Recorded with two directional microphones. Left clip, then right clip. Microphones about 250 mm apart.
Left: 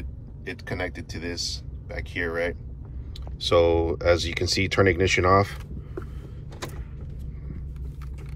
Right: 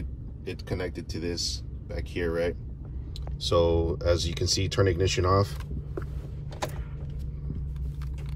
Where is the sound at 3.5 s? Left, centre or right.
Centre.